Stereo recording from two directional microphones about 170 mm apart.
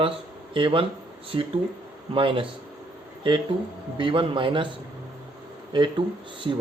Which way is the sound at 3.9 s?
30° right (ahead or behind).